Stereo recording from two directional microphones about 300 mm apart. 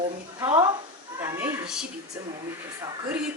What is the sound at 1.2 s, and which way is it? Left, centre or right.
Cat, centre.